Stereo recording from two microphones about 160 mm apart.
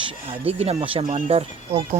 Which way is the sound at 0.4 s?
35° right (ahead or behind).